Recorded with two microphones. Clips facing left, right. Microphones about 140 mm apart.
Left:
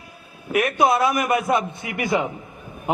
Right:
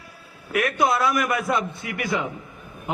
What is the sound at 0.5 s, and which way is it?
A man's voice, 20° left (ahead or behind).